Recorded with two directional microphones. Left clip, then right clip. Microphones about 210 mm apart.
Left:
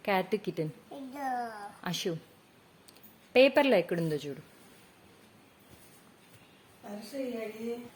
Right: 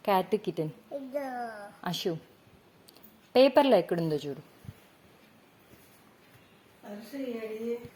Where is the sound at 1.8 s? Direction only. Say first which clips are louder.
Right 2 dB; 5° right (ahead or behind).